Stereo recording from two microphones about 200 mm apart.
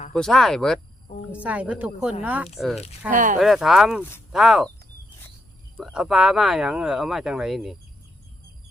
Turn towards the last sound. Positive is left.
turn(degrees=0)  # may be behind; listen again after turning